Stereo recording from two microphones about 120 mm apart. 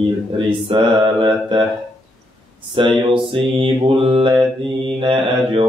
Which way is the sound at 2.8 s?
45° right (ahead or behind).